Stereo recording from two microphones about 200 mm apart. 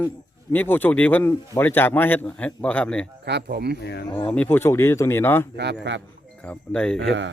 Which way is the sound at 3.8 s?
55° left (ahead or behind).